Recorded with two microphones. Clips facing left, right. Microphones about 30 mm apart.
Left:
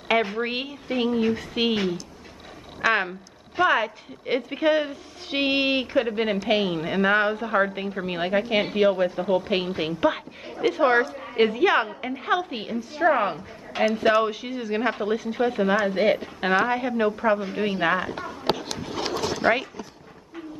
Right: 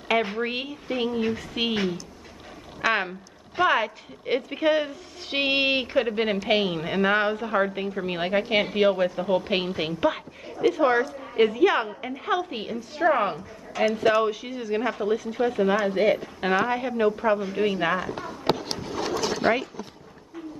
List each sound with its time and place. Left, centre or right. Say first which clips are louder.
0.4 s a woman's voice: left 1 dB; centre
5.3 s a woman's voice: even; centre
10.6 s a woman's voice: left 1 dB; centre
13.8 s a woman's voice: left 1 dB; centre
14.8 s a woman's voice: left 1 dB; left
15.9 s a woman's voice: even; left
18.8 s a sound: even; left